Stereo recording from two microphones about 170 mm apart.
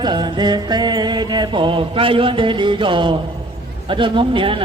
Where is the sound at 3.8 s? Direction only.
30° right (ahead or behind).